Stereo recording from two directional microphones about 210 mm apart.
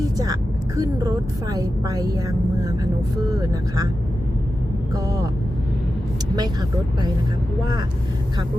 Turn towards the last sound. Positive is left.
turn(degrees=-20)  # may be behind; listen again after turning